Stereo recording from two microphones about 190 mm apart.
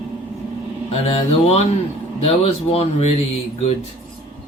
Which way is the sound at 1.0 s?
30° left (ahead or behind).